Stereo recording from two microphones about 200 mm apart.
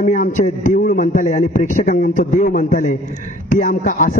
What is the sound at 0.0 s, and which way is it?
A man's voice, 40° left (ahead or behind).